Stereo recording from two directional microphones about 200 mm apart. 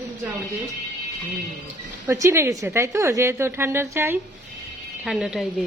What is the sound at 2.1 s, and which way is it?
A woman's voice, 15° right (ahead or behind).